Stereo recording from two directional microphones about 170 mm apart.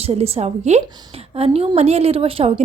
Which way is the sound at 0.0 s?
35° right (ahead or behind).